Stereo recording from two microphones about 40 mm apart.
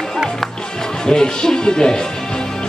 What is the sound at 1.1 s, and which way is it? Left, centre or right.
Music, centre.